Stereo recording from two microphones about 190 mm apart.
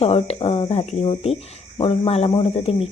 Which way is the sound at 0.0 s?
30° left (ahead or behind).